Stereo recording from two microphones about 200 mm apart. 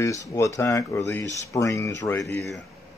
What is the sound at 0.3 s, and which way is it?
Speech, 15° left (ahead or behind).